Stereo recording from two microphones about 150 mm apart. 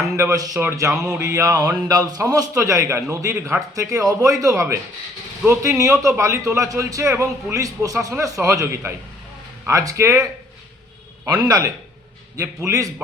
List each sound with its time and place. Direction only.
0.0 s a man's voice: 20° right (ahead or behind)
11.3 s a man's voice: 25° right (ahead or behind)